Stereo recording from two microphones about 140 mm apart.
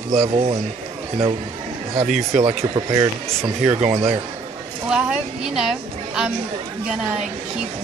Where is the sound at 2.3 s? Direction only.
55° right (ahead or behind).